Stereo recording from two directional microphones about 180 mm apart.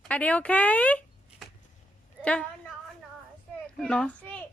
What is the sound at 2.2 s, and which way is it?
Speech, 5° left (ahead or behind).